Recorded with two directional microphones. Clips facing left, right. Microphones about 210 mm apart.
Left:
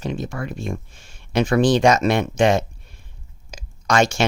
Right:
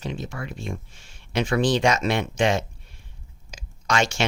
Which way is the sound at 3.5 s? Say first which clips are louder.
Left 5 dB; 45° left (ahead or behind).